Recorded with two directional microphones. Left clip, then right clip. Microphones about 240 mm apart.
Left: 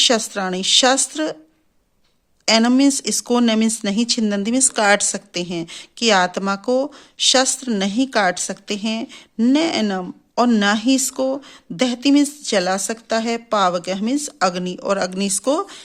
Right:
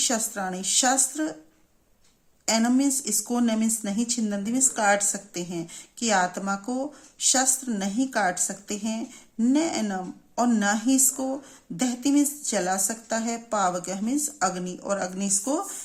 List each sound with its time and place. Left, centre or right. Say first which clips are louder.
0.0 s speech: left 10 dB; left
2.5 s speech: left 8 dB; left